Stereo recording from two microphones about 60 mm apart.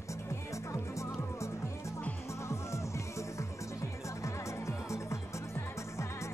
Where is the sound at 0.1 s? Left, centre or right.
Left.